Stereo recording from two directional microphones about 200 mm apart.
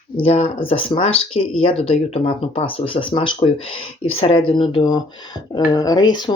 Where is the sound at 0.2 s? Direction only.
30° left (ahead or behind).